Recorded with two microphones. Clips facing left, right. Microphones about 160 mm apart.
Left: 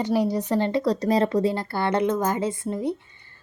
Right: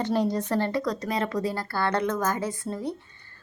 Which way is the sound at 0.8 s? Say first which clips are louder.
Left 7 dB; 35° left (ahead or behind).